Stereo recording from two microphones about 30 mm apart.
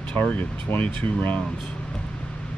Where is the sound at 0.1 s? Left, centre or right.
Left.